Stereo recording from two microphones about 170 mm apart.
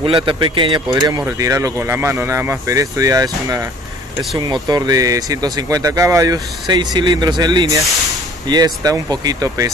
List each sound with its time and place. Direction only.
0.0 s speech: 30° right (ahead or behind)